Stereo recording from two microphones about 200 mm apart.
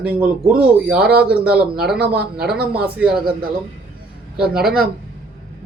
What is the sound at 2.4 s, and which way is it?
Speech, 5° right (ahead or behind).